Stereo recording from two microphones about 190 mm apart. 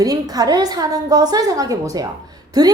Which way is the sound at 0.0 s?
20° right (ahead or behind).